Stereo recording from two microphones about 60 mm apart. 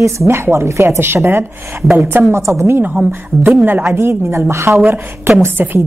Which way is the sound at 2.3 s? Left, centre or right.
Right.